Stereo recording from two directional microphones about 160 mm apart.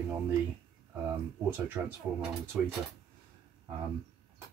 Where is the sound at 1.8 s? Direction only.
15° right (ahead or behind).